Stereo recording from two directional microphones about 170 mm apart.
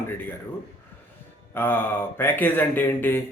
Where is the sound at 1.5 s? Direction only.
10° left (ahead or behind).